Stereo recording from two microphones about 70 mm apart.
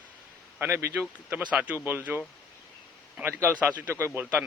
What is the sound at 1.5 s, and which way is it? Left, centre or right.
Speech, centre.